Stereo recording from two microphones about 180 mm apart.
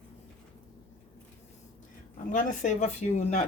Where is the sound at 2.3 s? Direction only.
40° left (ahead or behind).